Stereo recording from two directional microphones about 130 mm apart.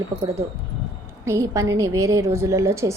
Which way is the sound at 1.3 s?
25° right (ahead or behind).